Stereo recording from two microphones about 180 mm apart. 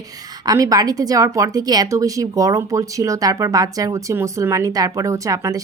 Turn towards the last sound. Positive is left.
turn(degrees=-20)  # may be behind; listen again after turning